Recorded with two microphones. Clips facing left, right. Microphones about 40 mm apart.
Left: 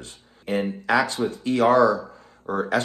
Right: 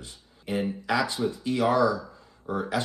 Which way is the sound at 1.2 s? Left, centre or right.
Left.